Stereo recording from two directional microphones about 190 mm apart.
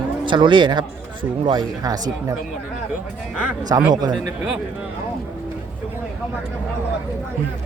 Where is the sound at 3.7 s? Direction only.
20° right (ahead or behind).